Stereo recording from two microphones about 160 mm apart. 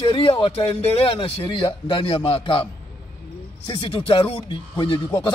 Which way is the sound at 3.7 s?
35° left (ahead or behind).